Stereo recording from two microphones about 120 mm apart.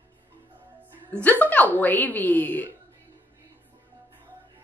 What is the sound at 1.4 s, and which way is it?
Speech, 15° left (ahead or behind).